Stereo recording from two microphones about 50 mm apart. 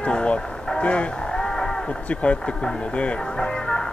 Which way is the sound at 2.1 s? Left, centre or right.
Left.